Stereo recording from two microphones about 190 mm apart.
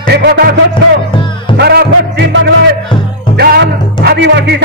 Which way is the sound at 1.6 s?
60° right (ahead or behind).